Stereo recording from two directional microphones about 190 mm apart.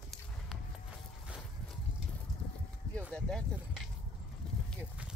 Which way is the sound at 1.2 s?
5° right (ahead or behind).